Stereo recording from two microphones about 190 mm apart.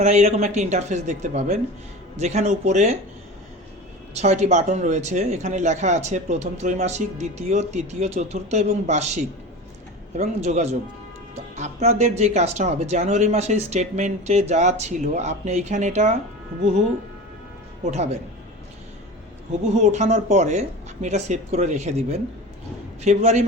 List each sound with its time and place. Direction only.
0.0 s speech: 35° right (ahead or behind)
4.1 s speech: 35° right (ahead or behind)
10.2 s speech: 35° right (ahead or behind)
17.9 s speech: 35° right (ahead or behind)
19.7 s speech: 35° right (ahead or behind)